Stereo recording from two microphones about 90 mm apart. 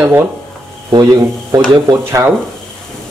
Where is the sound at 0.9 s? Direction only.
45° right (ahead or behind).